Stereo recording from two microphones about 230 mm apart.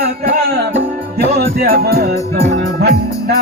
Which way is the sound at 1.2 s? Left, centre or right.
Right.